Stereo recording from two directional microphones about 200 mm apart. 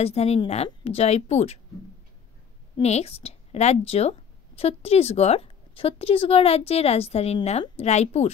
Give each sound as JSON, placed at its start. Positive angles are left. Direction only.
{"t": 0.0, "sound": "speech", "side_deg": 30}
{"t": 2.8, "sound": "speech", "side_deg": 30}